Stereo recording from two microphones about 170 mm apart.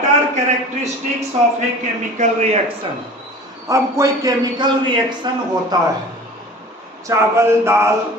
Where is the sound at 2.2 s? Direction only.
40° right (ahead or behind).